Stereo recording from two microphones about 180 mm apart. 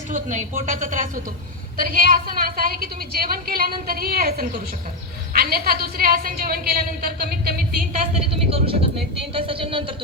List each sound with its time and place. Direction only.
0.1 s a woman's voice: 45° right (ahead or behind)
8.3 s speech: 30° right (ahead or behind)